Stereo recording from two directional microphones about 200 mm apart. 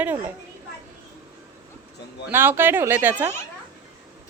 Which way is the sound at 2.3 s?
10° right (ahead or behind).